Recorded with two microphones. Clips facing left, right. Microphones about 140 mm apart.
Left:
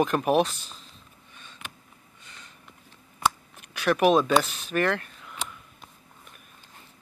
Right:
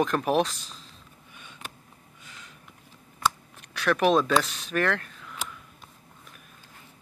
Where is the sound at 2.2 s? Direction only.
5° right (ahead or behind).